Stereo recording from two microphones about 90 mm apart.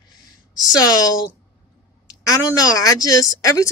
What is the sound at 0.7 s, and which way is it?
Speech, 50° left (ahead or behind).